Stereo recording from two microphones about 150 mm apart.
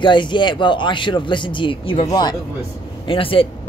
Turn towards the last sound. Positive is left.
turn(degrees=35)  # may be behind; listen again after turning